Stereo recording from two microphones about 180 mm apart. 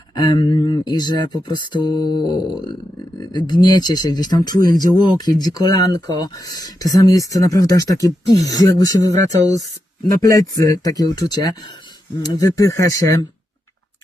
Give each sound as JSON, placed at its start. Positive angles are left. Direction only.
{"t": 0.1, "sound": "speech", "side_deg": 20}